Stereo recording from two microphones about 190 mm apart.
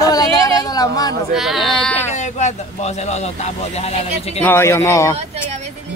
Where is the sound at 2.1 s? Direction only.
40° left (ahead or behind).